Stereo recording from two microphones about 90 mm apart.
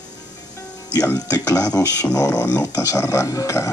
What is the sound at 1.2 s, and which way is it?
Speech, 45° left (ahead or behind).